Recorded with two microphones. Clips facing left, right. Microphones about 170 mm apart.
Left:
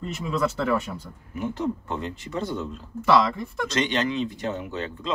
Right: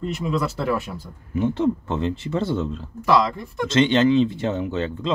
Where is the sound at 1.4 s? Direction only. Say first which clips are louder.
Right 6 dB; 25° right (ahead or behind).